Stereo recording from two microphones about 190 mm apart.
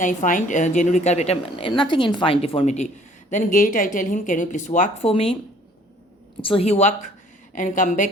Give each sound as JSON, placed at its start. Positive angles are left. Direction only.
{"t": 0.0, "sound": "a woman's voice", "side_deg": 45}
{"t": 6.4, "sound": "a woman's voice", "side_deg": 30}